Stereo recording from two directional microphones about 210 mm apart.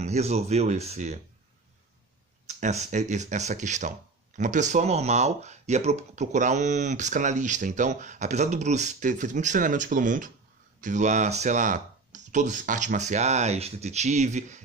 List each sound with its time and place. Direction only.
0.0 s speech: 30° right (ahead or behind)
2.4 s speech: 35° right (ahead or behind)